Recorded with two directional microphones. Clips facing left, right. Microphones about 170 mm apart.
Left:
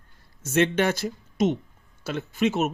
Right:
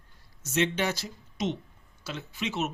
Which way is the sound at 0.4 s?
55° left (ahead or behind).